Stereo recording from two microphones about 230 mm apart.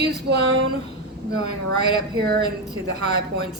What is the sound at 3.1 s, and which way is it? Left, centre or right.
Speech, right.